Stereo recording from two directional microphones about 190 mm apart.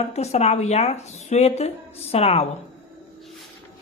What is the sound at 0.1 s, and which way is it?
Speech, 35° left (ahead or behind).